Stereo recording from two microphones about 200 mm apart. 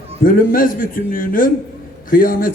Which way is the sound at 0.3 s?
45° left (ahead or behind).